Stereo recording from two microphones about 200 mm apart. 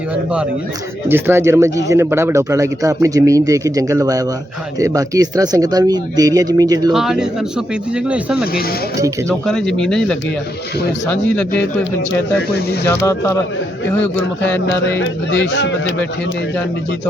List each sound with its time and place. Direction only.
1.0 s speech: 10° right (ahead or behind)
6.9 s speech: centre (ahead or behind)
9.5 s speech: 5° left (ahead or behind)
12.8 s speech: 15° left (ahead or behind)
14.9 s speech: 65° left (ahead or behind)